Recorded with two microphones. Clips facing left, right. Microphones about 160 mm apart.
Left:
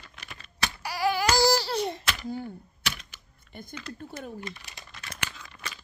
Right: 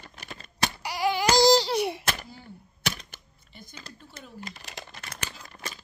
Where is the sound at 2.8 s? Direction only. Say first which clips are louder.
Right 3 dB; 45° right (ahead or behind).